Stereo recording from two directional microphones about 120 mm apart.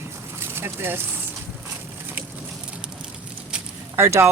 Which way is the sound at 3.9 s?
20° right (ahead or behind).